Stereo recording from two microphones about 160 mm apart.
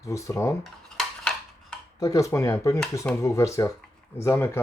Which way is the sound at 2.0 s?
20° left (ahead or behind).